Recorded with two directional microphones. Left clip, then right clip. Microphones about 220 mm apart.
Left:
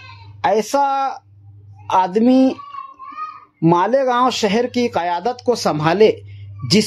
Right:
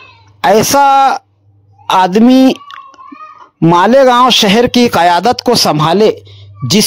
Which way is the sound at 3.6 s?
40° right (ahead or behind).